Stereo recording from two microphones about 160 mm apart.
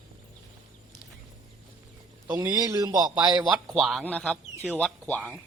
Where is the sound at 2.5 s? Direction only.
25° right (ahead or behind).